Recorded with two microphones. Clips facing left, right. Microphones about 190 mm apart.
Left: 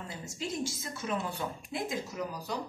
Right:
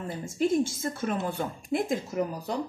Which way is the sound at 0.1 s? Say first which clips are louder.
Right 13 dB; 55° right (ahead or behind).